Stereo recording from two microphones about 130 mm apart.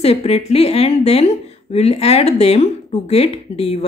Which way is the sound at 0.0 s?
50° left (ahead or behind).